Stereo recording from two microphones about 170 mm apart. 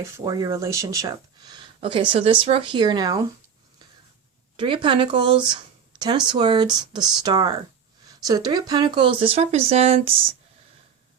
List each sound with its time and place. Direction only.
0.3 s speech: 20° right (ahead or behind)
1.8 s speech: 30° right (ahead or behind)
4.5 s speech: 30° right (ahead or behind)